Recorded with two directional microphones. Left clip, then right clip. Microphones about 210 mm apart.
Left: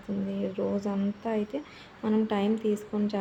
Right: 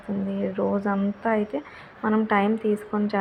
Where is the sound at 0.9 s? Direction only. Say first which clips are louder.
Right 7 dB; centre (ahead or behind).